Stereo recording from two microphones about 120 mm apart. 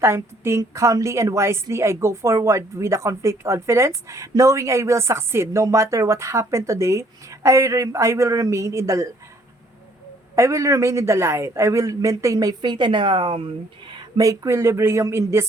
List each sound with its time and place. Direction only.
0.0 s a woman's voice: 20° right (ahead or behind)
10.3 s a woman's voice: 25° right (ahead or behind); by 13.5 s 50° right (ahead or behind)
13.9 s a woman's voice: 30° right (ahead or behind)